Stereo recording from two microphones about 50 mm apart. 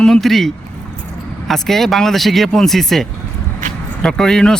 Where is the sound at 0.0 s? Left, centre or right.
Centre.